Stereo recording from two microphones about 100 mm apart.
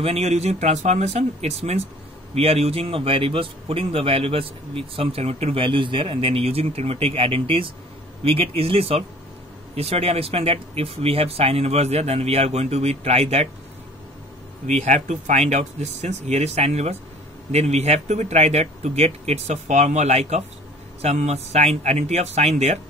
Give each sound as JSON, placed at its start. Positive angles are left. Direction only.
{"t": 0.0, "sound": "a man's voice", "side_deg": -90}
{"t": 9.8, "sound": "speech", "side_deg": -90}
{"t": 16.3, "sound": "speech", "side_deg": -90}